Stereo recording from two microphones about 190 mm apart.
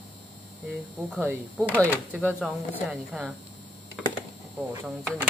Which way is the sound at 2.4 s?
Centre (ahead or behind).